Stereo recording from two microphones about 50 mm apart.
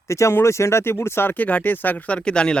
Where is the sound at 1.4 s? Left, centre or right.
Left.